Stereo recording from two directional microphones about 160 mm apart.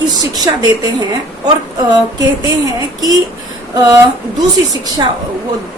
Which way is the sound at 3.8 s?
20° right (ahead or behind).